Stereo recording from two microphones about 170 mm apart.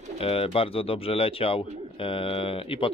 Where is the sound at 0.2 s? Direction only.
35° left (ahead or behind).